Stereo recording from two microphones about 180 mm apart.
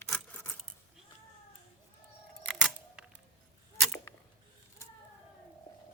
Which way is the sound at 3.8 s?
5° left (ahead or behind).